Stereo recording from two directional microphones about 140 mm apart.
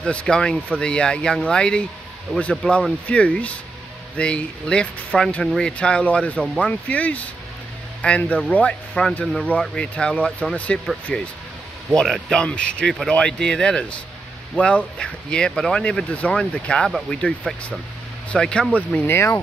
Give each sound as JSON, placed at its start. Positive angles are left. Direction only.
{"t": 0.0, "sound": "speech", "side_deg": 5}
{"t": 18.3, "sound": "speech", "side_deg": 5}